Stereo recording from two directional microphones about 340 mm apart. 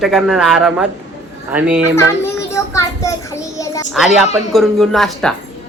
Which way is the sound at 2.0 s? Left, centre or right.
Centre.